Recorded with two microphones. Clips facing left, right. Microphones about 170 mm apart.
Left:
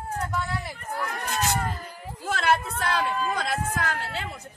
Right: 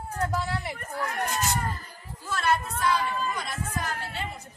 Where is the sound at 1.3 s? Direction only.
65° left (ahead or behind).